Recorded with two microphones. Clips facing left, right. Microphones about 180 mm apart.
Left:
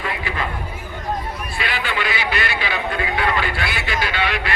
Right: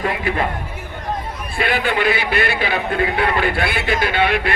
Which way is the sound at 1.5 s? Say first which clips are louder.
Right 7 dB; 50° right (ahead or behind).